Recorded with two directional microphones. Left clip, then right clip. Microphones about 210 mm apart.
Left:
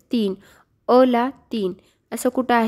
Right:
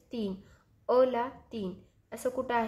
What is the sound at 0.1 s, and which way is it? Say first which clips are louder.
A woman's voice: left 13 dB; 45° left (ahead or behind).